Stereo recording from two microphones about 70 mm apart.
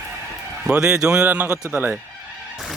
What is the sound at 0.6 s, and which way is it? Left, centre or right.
Speech, centre.